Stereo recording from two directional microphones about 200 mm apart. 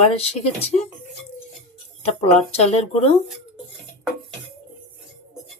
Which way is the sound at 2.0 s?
30° left (ahead or behind).